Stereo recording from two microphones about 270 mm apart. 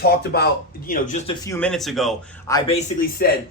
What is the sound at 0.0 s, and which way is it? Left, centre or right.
Speech, left.